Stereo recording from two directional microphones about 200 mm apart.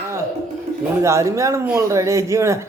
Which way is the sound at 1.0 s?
15° right (ahead or behind).